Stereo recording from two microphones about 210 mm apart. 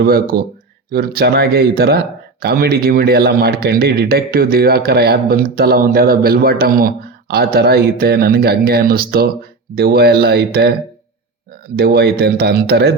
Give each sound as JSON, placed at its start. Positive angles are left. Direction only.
{"t": 0.0, "sound": "a man's voice", "side_deg": -45}
{"t": 11.8, "sound": "a man's voice", "side_deg": -50}